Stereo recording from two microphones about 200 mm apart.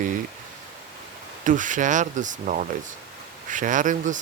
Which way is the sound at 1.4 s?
40° right (ahead or behind).